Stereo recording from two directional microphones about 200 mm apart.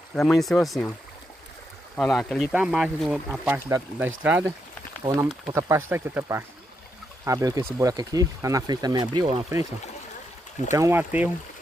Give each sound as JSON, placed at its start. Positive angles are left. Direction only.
{"t": 0.1, "sound": "speech", "side_deg": 0}
{"t": 2.0, "sound": "speech", "side_deg": 0}
{"t": 10.7, "sound": "speech", "side_deg": -15}